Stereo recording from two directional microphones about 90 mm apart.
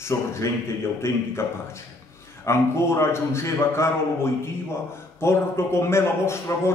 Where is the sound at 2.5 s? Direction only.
30° left (ahead or behind).